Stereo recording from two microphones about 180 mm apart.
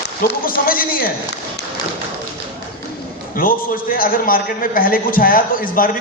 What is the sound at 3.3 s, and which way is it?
A man's voice, 50° left (ahead or behind).